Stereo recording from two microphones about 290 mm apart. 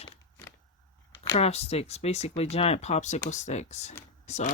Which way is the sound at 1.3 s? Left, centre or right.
Left.